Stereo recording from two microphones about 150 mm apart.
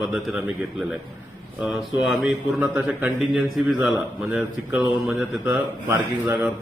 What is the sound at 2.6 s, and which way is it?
Speech, 5° right (ahead or behind).